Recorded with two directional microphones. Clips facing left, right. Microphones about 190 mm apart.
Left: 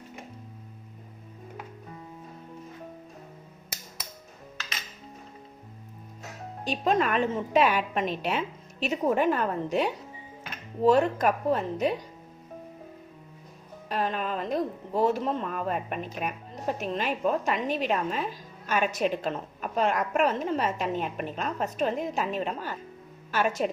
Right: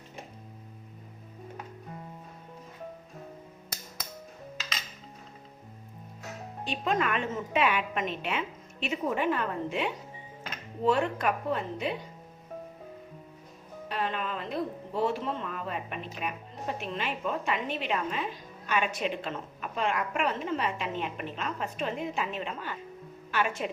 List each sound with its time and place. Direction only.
6.7 s a woman's voice: 40° left (ahead or behind)
13.8 s a woman's voice: 40° left (ahead or behind)